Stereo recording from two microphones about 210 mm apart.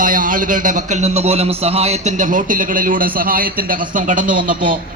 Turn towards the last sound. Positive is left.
turn(degrees=-40)  # may be behind; listen again after turning